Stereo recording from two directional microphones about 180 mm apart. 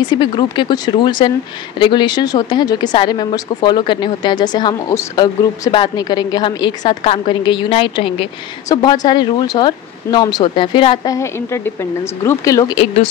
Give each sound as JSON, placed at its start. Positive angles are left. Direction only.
{"t": 0.1, "sound": "a woman's voice", "side_deg": 25}
{"t": 11.1, "sound": "speech", "side_deg": 15}